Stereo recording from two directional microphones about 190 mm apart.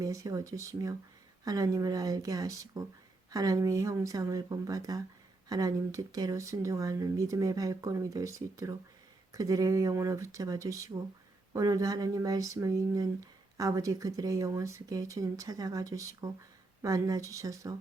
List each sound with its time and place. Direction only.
0.0 s speech: 15° right (ahead or behind)